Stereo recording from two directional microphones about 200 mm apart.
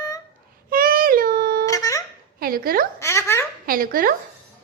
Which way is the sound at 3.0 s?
15° left (ahead or behind).